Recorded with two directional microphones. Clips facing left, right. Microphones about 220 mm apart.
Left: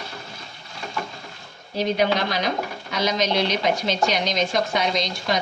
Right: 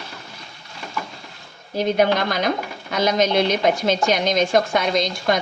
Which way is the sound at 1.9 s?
50° right (ahead or behind).